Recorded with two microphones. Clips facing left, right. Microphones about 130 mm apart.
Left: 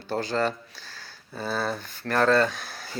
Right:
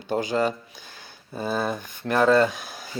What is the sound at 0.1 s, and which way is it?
Speech, 15° right (ahead or behind).